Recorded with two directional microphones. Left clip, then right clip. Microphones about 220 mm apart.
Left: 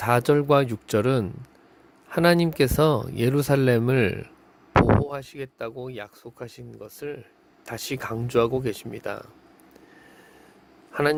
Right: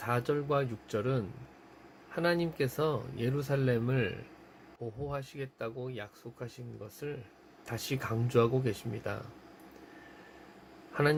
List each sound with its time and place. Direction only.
0.0 s speech: 50° left (ahead or behind)
10.9 s speech: 50° left (ahead or behind)